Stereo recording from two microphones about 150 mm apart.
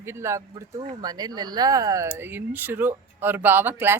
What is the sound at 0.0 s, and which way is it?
Speech, 15° right (ahead or behind).